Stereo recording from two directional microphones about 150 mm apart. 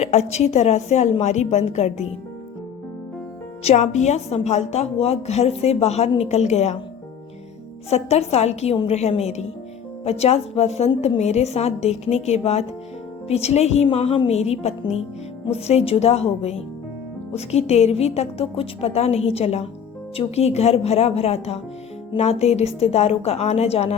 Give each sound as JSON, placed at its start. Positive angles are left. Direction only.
{"t": 0.0, "sound": "a woman's voice", "side_deg": 45}
{"t": 3.6, "sound": "a woman's voice", "side_deg": 45}
{"t": 7.9, "sound": "a woman's voice", "side_deg": 45}